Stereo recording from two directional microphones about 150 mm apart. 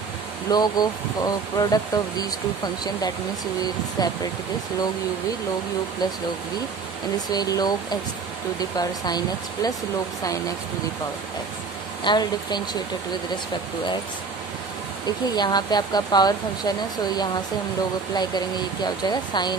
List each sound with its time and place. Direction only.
0.5 s speech: 25° left (ahead or behind)
4.0 s speech: 25° left (ahead or behind)
7.2 s speech: 25° left (ahead or behind)
12.0 s speech: 30° left (ahead or behind)
15.0 s speech: 30° left (ahead or behind)
19.0 s speech: 30° left (ahead or behind)